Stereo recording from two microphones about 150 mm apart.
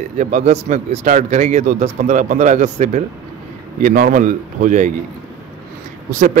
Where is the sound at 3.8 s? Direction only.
60° right (ahead or behind).